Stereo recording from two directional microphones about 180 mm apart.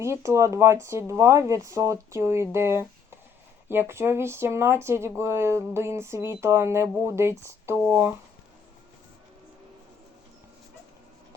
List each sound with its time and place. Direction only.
0.0 s speech: 15° right (ahead or behind)